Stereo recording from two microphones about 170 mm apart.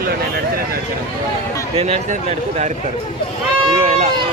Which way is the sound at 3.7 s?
35° right (ahead or behind).